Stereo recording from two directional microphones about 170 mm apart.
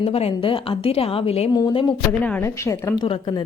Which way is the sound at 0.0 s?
35° left (ahead or behind).